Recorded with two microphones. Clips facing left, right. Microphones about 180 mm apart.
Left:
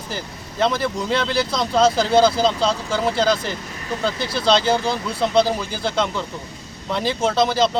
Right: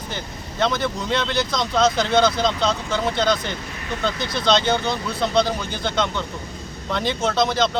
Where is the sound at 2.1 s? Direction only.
30° left (ahead or behind).